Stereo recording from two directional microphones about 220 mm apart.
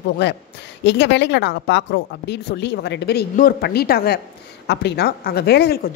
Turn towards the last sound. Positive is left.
turn(degrees=45)  # may be behind; listen again after turning